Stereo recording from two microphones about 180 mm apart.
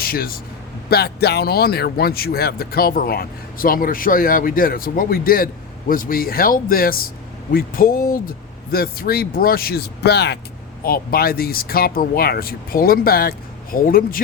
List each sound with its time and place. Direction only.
0.0 s a man's voice: 55° left (ahead or behind)